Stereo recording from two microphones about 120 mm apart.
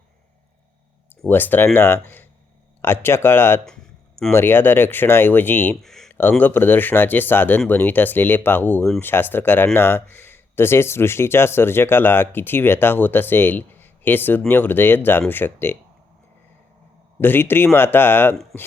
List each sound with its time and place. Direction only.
1.3 s speech: 15° left (ahead or behind)
5.8 s speech: 5° left (ahead or behind)
6.1 s speech: 15° left (ahead or behind)
17.2 s speech: 15° left (ahead or behind)